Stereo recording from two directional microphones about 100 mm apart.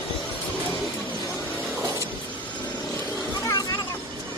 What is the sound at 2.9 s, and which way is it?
Vehicle, 15° left (ahead or behind).